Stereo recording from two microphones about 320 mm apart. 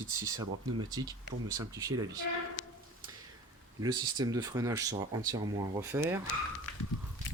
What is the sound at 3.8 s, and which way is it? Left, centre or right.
Speech, centre.